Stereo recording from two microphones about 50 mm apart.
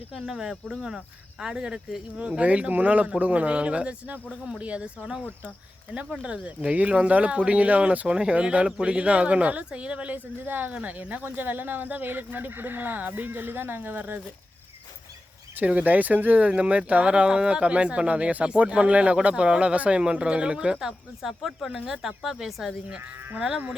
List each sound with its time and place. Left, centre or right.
0.2 s speech: centre
4.3 s speech: centre
5.9 s speech: right
10.4 s speech: right
10.8 s speech: right
15.5 s speech: right; by 22.7 s centre
23.4 s speech: centre